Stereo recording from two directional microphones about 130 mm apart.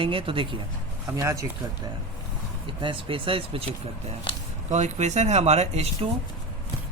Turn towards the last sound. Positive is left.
turn(degrees=-55)  # may be behind; listen again after turning